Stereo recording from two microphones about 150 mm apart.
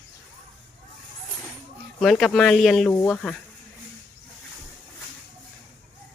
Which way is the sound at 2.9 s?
15° left (ahead or behind).